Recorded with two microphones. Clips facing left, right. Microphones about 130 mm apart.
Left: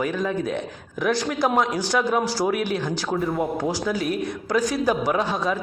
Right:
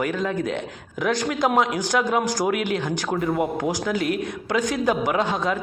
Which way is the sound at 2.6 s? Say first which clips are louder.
Even; 70° right (ahead or behind).